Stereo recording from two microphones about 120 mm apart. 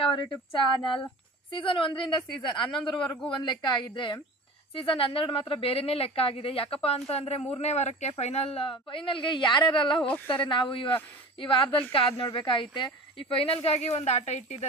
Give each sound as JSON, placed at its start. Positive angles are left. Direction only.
{"t": 0.0, "sound": "a woman's voice", "side_deg": 45}